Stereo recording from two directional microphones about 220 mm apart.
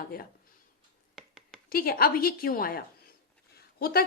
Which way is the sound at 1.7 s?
40° left (ahead or behind).